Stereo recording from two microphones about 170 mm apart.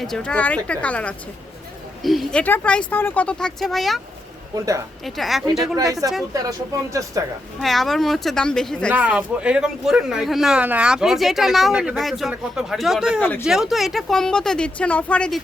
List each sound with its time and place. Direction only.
0.0 s speech: 5° left (ahead or behind)
4.5 s speech: 20° right (ahead or behind)
5.0 s speech: centre (ahead or behind)
5.7 s speech: 20° right (ahead or behind)
7.6 s speech: centre (ahead or behind)
8.9 s speech: 10° right (ahead or behind); by 15.4 s 5° left (ahead or behind)